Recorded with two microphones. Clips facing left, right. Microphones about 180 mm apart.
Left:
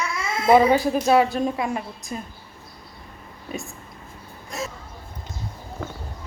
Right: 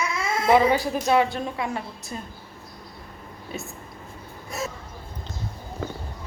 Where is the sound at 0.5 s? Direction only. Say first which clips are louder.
Left 4 dB; 20° left (ahead or behind).